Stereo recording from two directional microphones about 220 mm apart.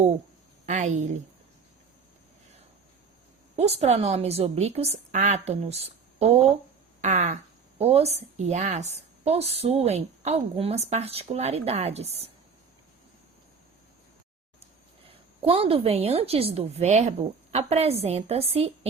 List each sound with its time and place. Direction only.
0.6 s a woman's voice: 30° right (ahead or behind)
3.5 s a woman's voice: 25° right (ahead or behind)
7.0 s a sound: 35° right (ahead or behind)
7.8 s a woman's voice: 30° right (ahead or behind)
15.4 s a woman's voice: 25° right (ahead or behind)